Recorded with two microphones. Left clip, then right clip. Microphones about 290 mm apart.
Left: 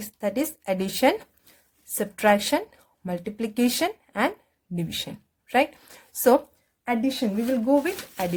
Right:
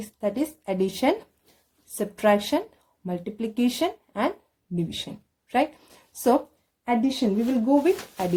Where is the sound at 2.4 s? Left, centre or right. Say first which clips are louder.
Left 1 dB; left.